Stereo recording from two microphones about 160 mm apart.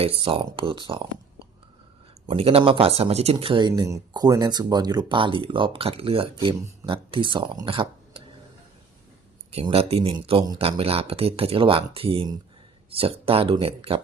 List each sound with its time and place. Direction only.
0.0 s speech: 35° right (ahead or behind)
2.2 s speech: 35° right (ahead or behind)
3.3 s speech: 30° right (ahead or behind)
9.5 s speech: 40° right (ahead or behind)